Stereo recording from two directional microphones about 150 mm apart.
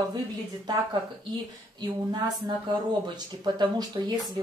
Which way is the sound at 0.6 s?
30° right (ahead or behind).